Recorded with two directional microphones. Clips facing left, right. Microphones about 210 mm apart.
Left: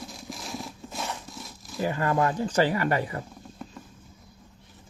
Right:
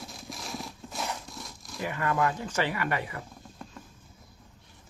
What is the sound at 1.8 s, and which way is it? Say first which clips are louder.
Speech: left 3 dB; 35° left (ahead or behind).